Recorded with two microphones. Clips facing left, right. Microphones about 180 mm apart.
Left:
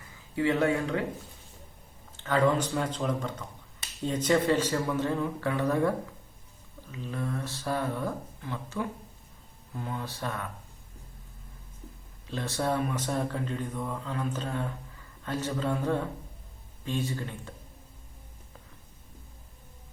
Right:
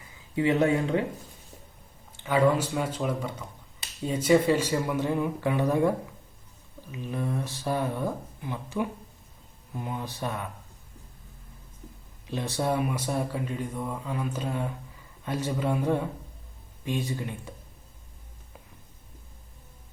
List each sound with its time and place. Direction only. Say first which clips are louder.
0.3 s speech: right 2 dB; 20° right (ahead or behind)
2.2 s speech: right 2 dB; 10° right (ahead or behind)
6.9 s speech: right 3 dB; 15° right (ahead or behind)
12.3 s speech: right 2 dB; 15° right (ahead or behind)